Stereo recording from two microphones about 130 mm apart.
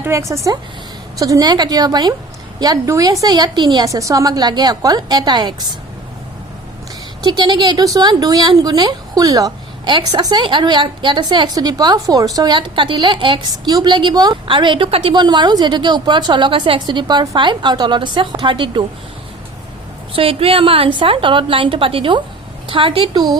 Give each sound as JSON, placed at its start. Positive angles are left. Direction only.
{"t": 0.0, "sound": "speech", "side_deg": -20}
{"t": 7.3, "sound": "a woman's voice", "side_deg": -35}
{"t": 15.1, "sound": "speech", "side_deg": -35}
{"t": 20.1, "sound": "a woman's voice", "side_deg": -45}